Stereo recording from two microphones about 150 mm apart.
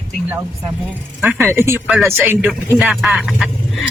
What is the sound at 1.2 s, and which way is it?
Speech, 15° right (ahead or behind).